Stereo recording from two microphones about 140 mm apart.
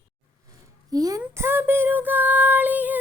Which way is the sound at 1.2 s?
15° right (ahead or behind).